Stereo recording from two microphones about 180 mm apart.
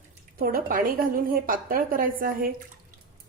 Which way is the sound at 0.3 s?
55° right (ahead or behind).